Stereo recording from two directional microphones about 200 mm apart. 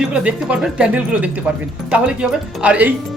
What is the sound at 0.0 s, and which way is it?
Speech, 5° right (ahead or behind).